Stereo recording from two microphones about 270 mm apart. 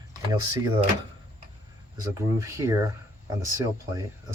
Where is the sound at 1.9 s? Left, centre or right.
Centre.